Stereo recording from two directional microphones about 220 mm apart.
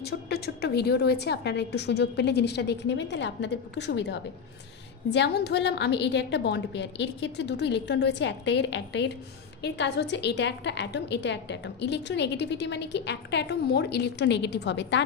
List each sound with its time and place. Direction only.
0.0 s a woman's voice: 45° left (ahead or behind)